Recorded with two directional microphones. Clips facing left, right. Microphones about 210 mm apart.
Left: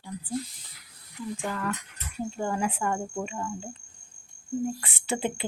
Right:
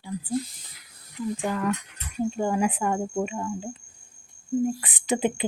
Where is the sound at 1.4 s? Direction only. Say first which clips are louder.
Right 5 dB; 15° right (ahead or behind).